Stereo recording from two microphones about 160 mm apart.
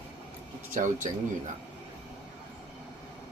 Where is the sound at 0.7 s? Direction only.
55° right (ahead or behind).